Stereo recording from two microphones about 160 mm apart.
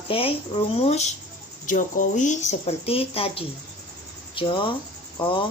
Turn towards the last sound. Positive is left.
turn(degrees=30)  # may be behind; listen again after turning